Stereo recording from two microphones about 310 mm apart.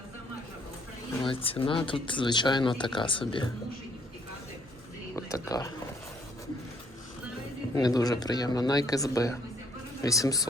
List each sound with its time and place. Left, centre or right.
1.2 s speech: centre
5.1 s speech: centre
7.8 s speech: centre